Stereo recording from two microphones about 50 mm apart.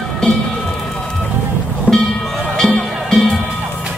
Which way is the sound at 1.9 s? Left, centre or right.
Left.